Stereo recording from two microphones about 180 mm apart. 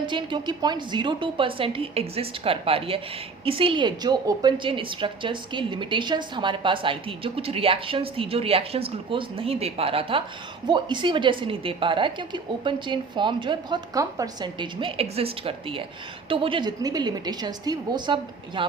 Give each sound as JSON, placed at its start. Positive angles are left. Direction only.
{"t": 0.0, "sound": "a woman's voice", "side_deg": -25}